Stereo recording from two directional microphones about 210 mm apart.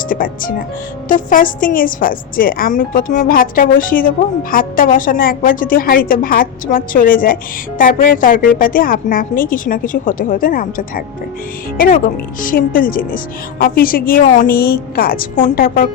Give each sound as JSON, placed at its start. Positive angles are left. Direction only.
{"t": 0.1, "sound": "a woman's voice", "side_deg": 40}